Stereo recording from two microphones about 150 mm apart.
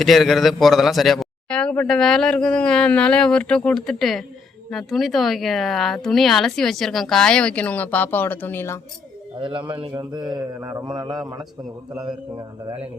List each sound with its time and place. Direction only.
0.0 s a man's voice: centre (ahead or behind)
9.4 s a man's voice: 35° right (ahead or behind)
12.6 s speech: 40° right (ahead or behind)